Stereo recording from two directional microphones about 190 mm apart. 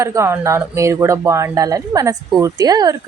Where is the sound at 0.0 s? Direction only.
15° right (ahead or behind).